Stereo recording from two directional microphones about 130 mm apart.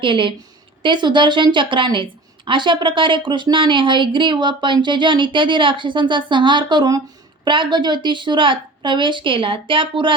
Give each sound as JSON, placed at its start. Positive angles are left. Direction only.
{"t": 0.0, "sound": "a woman's voice", "side_deg": -40}